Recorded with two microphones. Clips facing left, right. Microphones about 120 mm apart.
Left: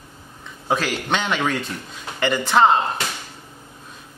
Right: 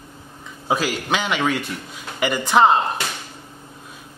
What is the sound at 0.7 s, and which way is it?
Speech, 5° right (ahead or behind).